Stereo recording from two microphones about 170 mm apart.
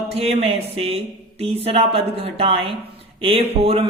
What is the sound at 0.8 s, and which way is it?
Speech, 35° right (ahead or behind).